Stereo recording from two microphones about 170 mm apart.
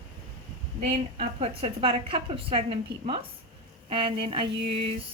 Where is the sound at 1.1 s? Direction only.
35° right (ahead or behind).